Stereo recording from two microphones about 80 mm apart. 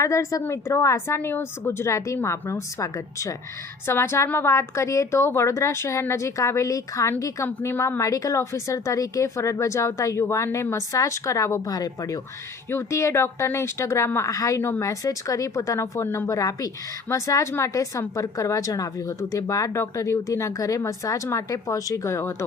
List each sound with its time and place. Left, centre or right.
0.0 s a woman's voice: left
3.8 s a woman's voice: left
12.7 s a woman's voice: left
14.6 s speech: left
14.8 s a woman's voice: left
16.4 s a woman's voice: left